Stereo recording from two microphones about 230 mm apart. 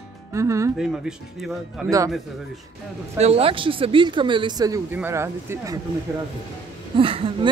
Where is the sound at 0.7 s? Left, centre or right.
Centre.